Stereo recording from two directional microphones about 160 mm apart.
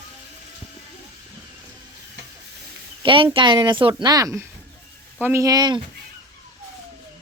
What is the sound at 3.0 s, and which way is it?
A woman's voice, 30° right (ahead or behind).